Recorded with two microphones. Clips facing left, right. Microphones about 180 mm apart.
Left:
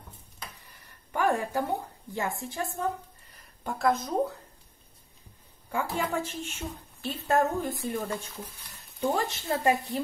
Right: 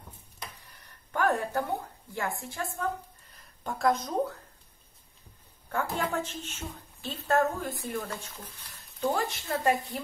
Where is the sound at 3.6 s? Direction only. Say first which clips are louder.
Even; 5° left (ahead or behind).